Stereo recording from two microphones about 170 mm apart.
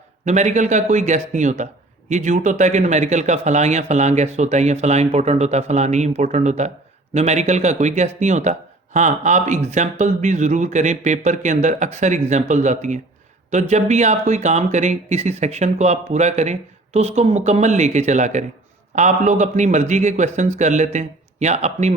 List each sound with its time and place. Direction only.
0.3 s speech: 45° right (ahead or behind)